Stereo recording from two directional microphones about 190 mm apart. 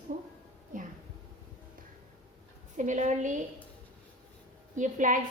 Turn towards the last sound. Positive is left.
turn(degrees=-40)  # may be behind; listen again after turning